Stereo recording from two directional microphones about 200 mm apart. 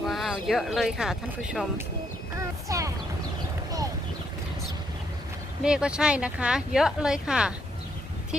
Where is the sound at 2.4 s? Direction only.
15° right (ahead or behind).